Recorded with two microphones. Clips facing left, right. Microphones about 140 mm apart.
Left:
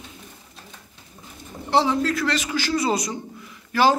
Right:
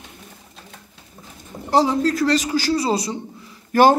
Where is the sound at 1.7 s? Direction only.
40° right (ahead or behind).